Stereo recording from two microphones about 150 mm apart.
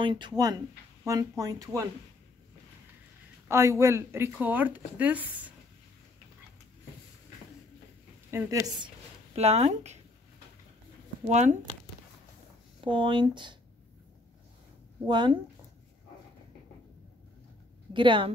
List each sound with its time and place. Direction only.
0.0 s speech: 30° right (ahead or behind)
3.4 s speech: 15° right (ahead or behind)
8.3 s a woman's voice: 15° right (ahead or behind)
8.6 s speech: 30° right (ahead or behind)
9.3 s speech: 45° right (ahead or behind)
11.2 s speech: 50° right (ahead or behind)
12.8 s speech: 35° right (ahead or behind)
15.0 s speech: 30° right (ahead or behind)
17.9 s speech: 30° right (ahead or behind)